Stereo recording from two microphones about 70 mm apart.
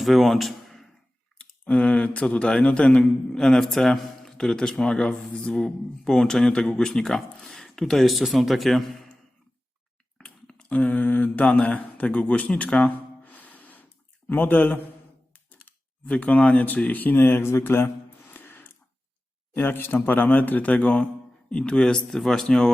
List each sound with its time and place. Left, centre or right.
0.0 s speech: centre
1.4 s speech: centre
10.2 s mantra: centre
14.3 s a man's voice: left
15.4 s a sound: left
19.5 s a man's voice: left; by 22.7 s centre